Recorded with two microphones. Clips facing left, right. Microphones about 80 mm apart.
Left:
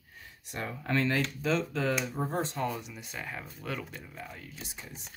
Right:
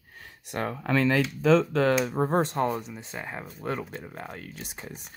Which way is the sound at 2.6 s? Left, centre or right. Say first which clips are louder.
Right 6 dB; right.